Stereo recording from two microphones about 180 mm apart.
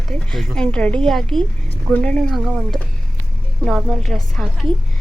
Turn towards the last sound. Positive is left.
turn(degrees=0)  # may be behind; listen again after turning